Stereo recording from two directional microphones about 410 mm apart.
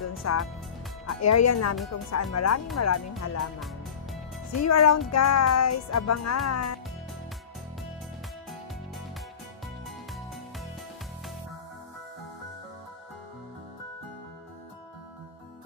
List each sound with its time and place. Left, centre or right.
0.0 s music: left
1.2 s speech: left
3.5 s music: centre
4.6 s speech: left
9.8 s music: centre